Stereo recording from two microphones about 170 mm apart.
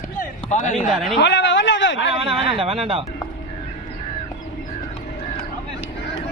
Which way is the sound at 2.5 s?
35° right (ahead or behind).